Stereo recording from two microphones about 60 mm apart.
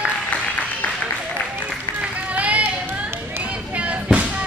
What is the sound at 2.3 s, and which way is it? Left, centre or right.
Run, right.